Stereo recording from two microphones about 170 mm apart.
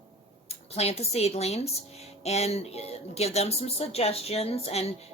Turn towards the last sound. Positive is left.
turn(degrees=35)  # may be behind; listen again after turning